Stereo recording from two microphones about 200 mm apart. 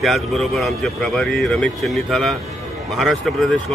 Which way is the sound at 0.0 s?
Centre (ahead or behind).